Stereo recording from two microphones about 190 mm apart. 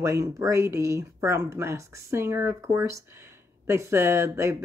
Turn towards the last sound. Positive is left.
turn(degrees=-15)  # may be behind; listen again after turning